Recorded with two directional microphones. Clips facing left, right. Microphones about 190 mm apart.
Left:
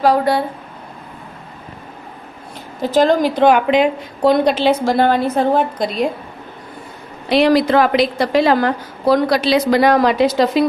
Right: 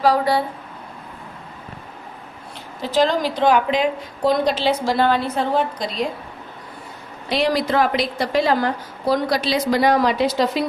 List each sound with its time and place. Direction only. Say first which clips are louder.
0.0 s a woman's voice: left 3 dB; 55° left (ahead or behind)
2.8 s a woman's voice: left 5 dB; 50° left (ahead or behind)
7.3 s a woman's voice: left 7 dB; 70° left (ahead or behind); by 10.7 s 90° left